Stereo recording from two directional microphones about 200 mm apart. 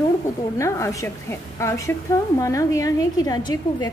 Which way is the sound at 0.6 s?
15° left (ahead or behind).